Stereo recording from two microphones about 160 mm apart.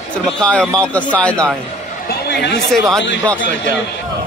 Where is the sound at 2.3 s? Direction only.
90° left.